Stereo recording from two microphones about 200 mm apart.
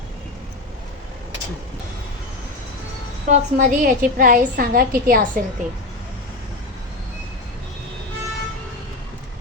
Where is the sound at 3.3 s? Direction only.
40° right (ahead or behind).